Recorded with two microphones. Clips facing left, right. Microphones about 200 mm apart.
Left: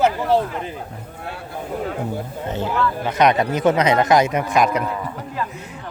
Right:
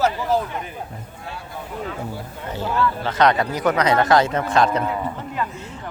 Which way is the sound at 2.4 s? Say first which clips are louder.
Even; 20° left (ahead or behind).